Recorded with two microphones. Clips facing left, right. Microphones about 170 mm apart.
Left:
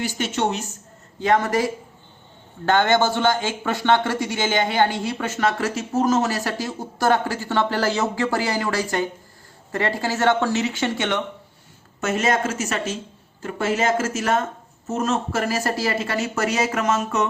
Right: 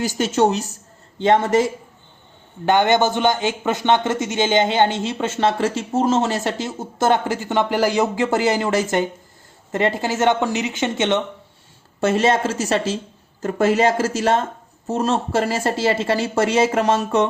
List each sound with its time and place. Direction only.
0.0 s speech: 40° right (ahead or behind)
1.2 s speech: 25° right (ahead or behind)
11.9 s speech: 30° right (ahead or behind)